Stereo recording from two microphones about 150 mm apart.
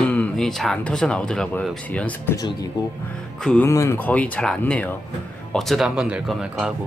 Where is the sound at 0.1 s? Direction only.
5° left (ahead or behind).